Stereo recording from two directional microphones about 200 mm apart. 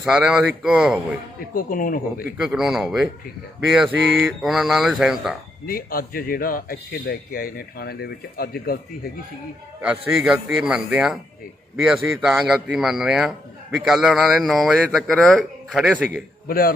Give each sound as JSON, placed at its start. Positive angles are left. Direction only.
{"t": 0.0, "sound": "a man's voice", "side_deg": -5}
{"t": 1.5, "sound": "speech", "side_deg": 45}
{"t": 2.4, "sound": "a man's voice", "side_deg": -5}
{"t": 5.6, "sound": "speech", "side_deg": 45}
{"t": 9.8, "sound": "a man's voice", "side_deg": -5}
{"t": 16.5, "sound": "speech", "side_deg": 50}